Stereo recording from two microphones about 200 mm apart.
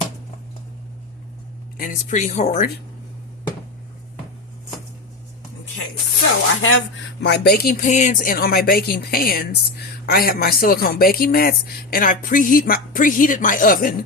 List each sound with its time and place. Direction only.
1.8 s speech: 40° left (ahead or behind)
6.6 s speech: 75° left (ahead or behind); by 13.9 s 45° left (ahead or behind)